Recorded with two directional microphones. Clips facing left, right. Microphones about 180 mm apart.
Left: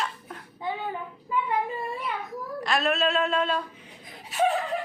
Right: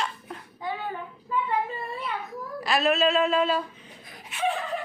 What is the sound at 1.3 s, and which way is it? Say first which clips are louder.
Child singing: even; 15° left (ahead or behind).